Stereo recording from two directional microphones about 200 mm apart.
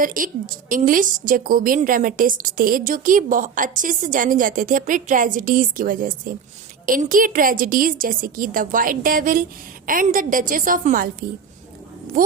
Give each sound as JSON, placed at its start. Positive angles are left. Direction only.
{"t": 0.0, "sound": "a woman's voice", "side_deg": -45}